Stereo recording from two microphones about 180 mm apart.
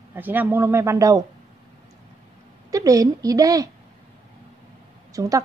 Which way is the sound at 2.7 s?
20° right (ahead or behind).